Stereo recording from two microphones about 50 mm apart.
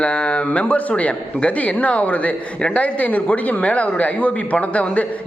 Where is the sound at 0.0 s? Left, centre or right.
Left.